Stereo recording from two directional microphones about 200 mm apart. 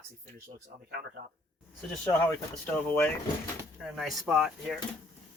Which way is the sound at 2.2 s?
5° left (ahead or behind).